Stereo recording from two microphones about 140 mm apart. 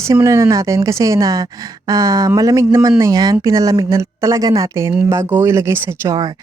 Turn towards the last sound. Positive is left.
turn(degrees=-15)  # may be behind; listen again after turning